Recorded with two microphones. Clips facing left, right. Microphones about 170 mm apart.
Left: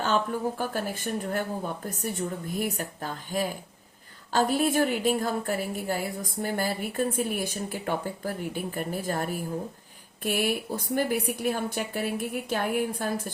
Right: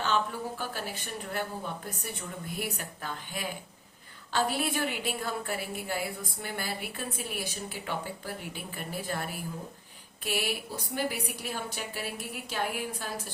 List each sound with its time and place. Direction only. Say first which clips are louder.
0.0 s speech: left 4 dB; 45° left (ahead or behind)